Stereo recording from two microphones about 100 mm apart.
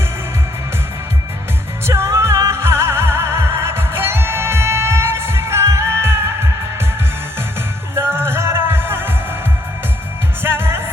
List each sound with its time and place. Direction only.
1.9 s music: 30° right (ahead or behind)
7.9 s music: 25° right (ahead or behind)
10.4 s music: 25° right (ahead or behind)